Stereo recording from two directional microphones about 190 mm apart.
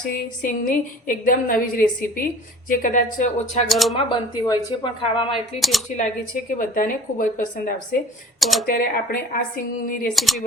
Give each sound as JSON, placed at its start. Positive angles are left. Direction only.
{"t": 0.0, "sound": "a woman's voice", "side_deg": 45}
{"t": 3.7, "sound": "speech", "side_deg": 0}
{"t": 3.9, "sound": "speech", "side_deg": 20}
{"t": 5.5, "sound": "speech", "side_deg": 0}
{"t": 6.0, "sound": "a woman's voice", "side_deg": 45}
{"t": 8.4, "sound": "speech", "side_deg": 0}
{"t": 8.6, "sound": "a woman's voice", "side_deg": 50}
{"t": 10.2, "sound": "speech", "side_deg": 0}